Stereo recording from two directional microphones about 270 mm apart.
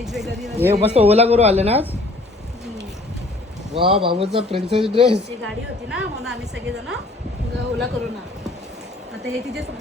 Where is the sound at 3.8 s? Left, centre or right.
Centre.